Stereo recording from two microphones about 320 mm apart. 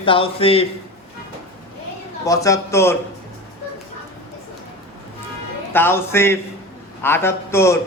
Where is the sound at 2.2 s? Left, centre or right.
Centre.